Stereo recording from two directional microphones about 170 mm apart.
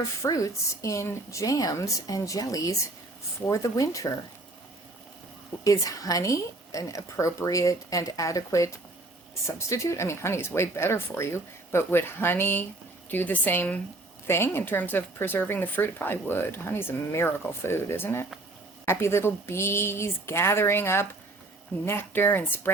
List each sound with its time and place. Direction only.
0.2 s speech: 20° left (ahead or behind)
5.6 s speech: 20° left (ahead or behind)